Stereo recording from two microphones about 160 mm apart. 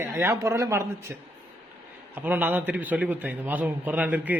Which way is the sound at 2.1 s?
10° right (ahead or behind).